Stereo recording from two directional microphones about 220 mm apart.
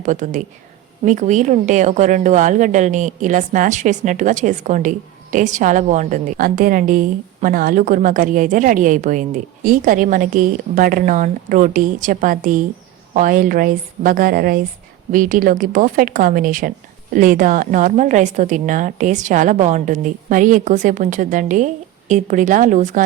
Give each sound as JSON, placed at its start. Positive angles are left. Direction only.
{"t": 0.0, "sound": "a woman's voice", "side_deg": -35}